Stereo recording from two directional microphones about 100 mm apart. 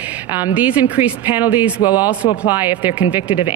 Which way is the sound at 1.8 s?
40° left (ahead or behind).